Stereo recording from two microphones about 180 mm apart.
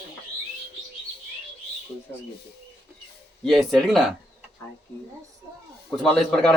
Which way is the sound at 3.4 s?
Centre (ahead or behind).